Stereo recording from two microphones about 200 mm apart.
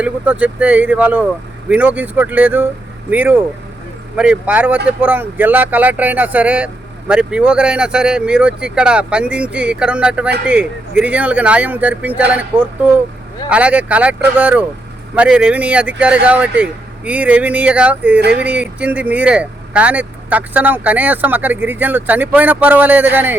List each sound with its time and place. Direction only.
0.0 s speech: 5° right (ahead or behind)